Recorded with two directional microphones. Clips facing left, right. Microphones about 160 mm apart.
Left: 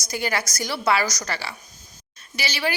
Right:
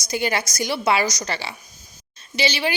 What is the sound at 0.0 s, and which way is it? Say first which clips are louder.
A woman's voice: right 3 dB; 20° right (ahead or behind).